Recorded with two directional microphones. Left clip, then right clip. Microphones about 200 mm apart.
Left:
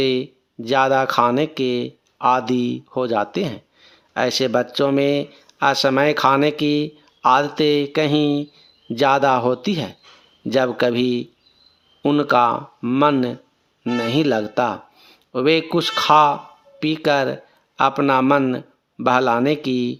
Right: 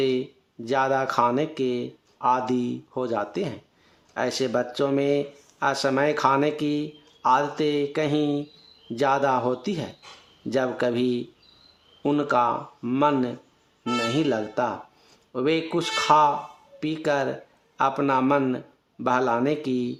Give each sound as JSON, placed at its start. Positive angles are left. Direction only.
{"t": 0.0, "sound": "speech", "side_deg": 35}